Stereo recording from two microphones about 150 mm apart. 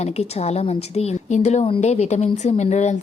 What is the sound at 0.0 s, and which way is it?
Speech, 45° left (ahead or behind).